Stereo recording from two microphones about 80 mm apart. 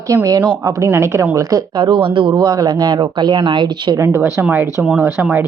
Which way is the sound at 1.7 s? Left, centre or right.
Right.